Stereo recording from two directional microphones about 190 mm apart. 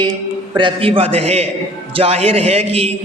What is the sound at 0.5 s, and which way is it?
A man's voice, 25° right (ahead or behind).